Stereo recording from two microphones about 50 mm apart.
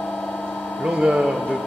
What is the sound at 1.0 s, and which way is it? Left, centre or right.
Speech, centre.